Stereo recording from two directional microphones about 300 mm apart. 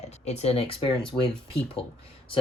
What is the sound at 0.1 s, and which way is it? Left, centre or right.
Speech, left.